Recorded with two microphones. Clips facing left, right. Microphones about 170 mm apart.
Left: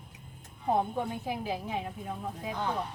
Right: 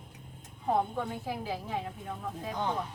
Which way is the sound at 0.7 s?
20° left (ahead or behind).